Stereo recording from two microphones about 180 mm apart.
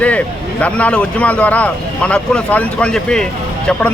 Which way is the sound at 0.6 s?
5° left (ahead or behind).